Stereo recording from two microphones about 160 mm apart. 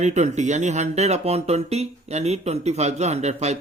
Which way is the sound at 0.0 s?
45° right (ahead or behind).